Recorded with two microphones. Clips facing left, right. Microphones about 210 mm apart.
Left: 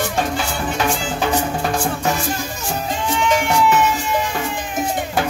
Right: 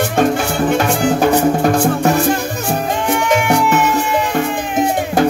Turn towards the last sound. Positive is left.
turn(degrees=-55)  # may be behind; listen again after turning